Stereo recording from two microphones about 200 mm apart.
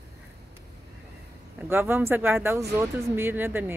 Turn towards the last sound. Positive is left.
turn(degrees=-10)  # may be behind; listen again after turning